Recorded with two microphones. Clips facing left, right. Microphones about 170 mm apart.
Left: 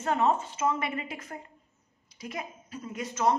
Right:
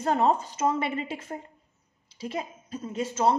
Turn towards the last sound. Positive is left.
turn(degrees=-30)  # may be behind; listen again after turning